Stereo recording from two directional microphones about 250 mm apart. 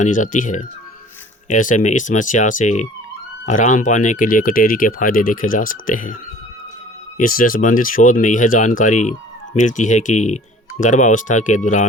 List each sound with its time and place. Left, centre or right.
0.0 s speech: left
7.2 s speech: left